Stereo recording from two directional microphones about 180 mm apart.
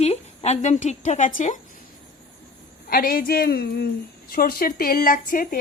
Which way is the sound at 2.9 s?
55° left (ahead or behind).